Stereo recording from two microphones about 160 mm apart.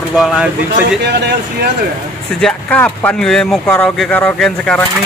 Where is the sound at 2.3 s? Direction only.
5° left (ahead or behind).